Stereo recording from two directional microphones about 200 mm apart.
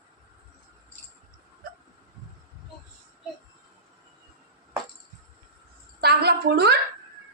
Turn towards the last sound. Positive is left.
turn(degrees=-55)  # may be behind; listen again after turning